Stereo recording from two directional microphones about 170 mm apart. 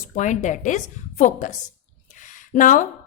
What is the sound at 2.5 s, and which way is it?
Speech, 50° left (ahead or behind).